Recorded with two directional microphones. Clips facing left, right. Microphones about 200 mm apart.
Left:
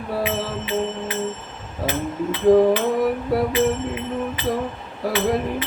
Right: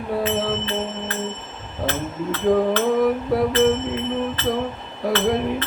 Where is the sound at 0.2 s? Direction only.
10° left (ahead or behind).